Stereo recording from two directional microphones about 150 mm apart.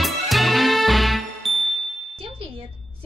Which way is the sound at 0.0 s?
Centre (ahead or behind).